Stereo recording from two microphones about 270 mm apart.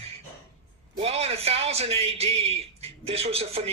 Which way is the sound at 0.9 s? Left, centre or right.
Right.